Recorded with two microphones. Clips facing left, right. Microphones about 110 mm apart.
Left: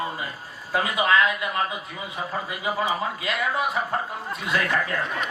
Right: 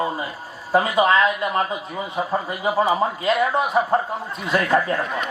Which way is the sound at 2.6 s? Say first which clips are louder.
Right 6 dB; 40° right (ahead or behind).